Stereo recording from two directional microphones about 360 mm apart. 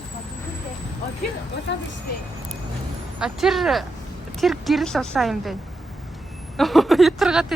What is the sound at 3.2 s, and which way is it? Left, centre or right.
Speech, centre.